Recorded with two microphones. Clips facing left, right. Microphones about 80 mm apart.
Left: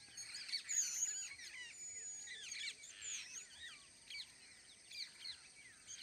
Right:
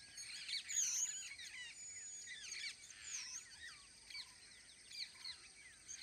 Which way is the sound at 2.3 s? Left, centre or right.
Centre.